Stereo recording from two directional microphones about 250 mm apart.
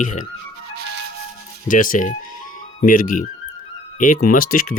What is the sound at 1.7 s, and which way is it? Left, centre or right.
Speech, left.